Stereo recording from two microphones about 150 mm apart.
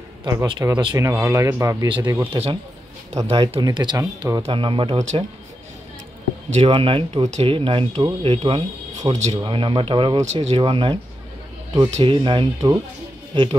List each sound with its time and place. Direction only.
0.2 s a man's voice: 20° right (ahead or behind)
1.9 s speech: 30° right (ahead or behind)
3.6 s a man's voice: 30° right (ahead or behind)
6.5 s speech: 40° right (ahead or behind)
8.9 s a sound: 25° right (ahead or behind)
9.3 s speech: 30° right (ahead or behind)
10.2 s speech: 50° right (ahead or behind)
10.6 s speech: 35° right (ahead or behind)